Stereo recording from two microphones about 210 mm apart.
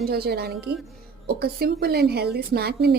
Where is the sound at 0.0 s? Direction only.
50° right (ahead or behind).